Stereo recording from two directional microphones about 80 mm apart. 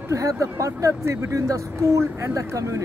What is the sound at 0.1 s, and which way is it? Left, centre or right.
Speech, right.